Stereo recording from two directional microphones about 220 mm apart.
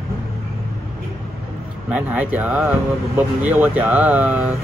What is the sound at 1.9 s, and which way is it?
Speech, 5° right (ahead or behind).